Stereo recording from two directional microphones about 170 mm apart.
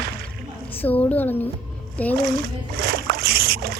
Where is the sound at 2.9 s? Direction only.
65° right (ahead or behind).